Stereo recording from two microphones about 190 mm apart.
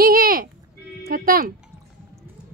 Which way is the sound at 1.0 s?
50° right (ahead or behind).